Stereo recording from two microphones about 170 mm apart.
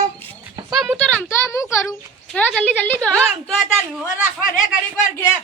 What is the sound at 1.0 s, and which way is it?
A child's voice, 10° left (ahead or behind).